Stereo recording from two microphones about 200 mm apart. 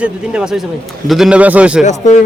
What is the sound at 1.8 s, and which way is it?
Speech, 35° left (ahead or behind).